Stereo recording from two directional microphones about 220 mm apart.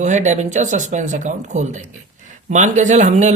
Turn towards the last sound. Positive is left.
turn(degrees=-35)  # may be behind; listen again after turning